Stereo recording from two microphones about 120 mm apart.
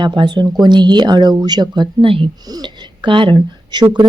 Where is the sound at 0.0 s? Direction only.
40° right (ahead or behind).